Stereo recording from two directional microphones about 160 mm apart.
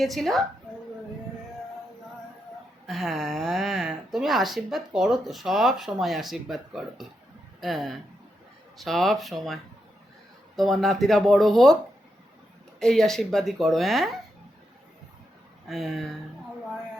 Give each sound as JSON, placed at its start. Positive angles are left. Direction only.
{"t": 0.0, "sound": "speech", "side_deg": 0}
{"t": 2.8, "sound": "speech", "side_deg": 0}
{"t": 12.8, "sound": "speech", "side_deg": 0}
{"t": 15.6, "sound": "speech", "side_deg": 0}